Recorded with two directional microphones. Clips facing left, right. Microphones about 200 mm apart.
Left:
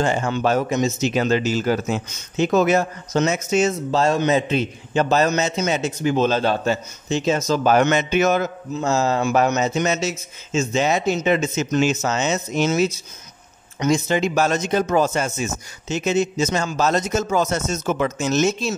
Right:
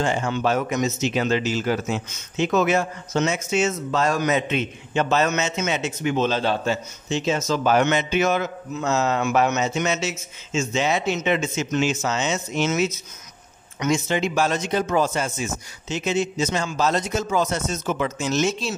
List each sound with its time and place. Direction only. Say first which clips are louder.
0.0 s speech: left 2 dB; 40° left (ahead or behind)
0.7 s speech: left 3 dB; 30° left (ahead or behind)
8.7 s speech: left 2 dB; 30° left (ahead or behind)